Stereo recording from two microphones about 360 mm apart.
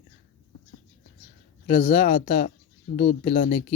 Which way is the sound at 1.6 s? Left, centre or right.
Centre.